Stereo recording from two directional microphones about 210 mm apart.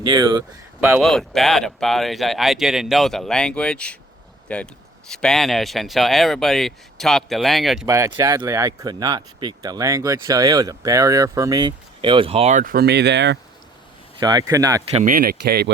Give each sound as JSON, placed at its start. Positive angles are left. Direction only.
{"t": 0.0, "sound": "speech", "side_deg": -20}
{"t": 0.8, "sound": "speech", "side_deg": -10}
{"t": 1.0, "sound": "speech", "side_deg": 0}
{"t": 7.9, "sound": "speech", "side_deg": -15}
{"t": 14.2, "sound": "speech", "side_deg": -20}
{"t": 14.8, "sound": "speech", "side_deg": -30}
{"t": 15.1, "sound": "speech", "side_deg": -45}